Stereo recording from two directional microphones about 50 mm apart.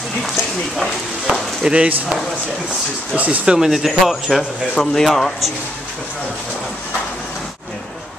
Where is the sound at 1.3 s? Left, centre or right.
Centre.